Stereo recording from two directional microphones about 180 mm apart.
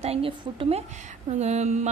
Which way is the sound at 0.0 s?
30° right (ahead or behind).